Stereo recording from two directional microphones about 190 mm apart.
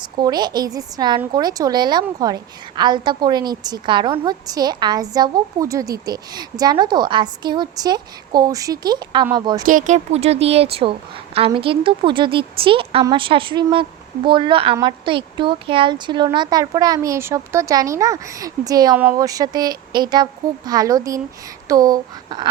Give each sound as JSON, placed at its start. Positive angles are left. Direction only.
{"t": 0.2, "sound": "a woman's voice", "side_deg": -20}
{"t": 9.6, "sound": "a woman's voice", "side_deg": -45}